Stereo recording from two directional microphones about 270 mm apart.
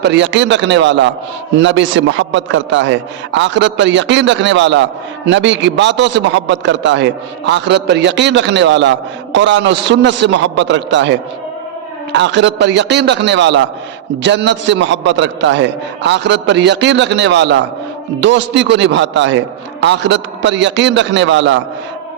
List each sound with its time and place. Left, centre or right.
0.0 s a man's voice: right